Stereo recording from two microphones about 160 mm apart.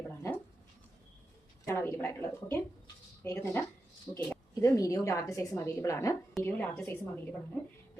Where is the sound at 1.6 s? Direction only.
15° left (ahead or behind).